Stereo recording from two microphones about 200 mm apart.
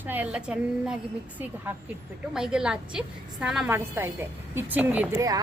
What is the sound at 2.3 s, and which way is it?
A woman's voice, 5° right (ahead or behind).